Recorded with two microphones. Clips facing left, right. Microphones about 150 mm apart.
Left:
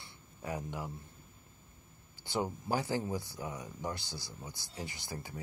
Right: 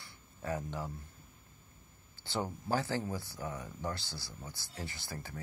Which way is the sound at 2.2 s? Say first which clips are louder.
Left 2 dB; 15° left (ahead or behind).